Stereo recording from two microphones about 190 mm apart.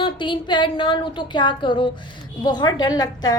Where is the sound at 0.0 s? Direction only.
25° left (ahead or behind).